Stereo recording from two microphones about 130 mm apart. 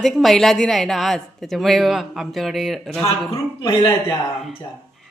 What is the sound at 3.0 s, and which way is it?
Speech, 25° left (ahead or behind).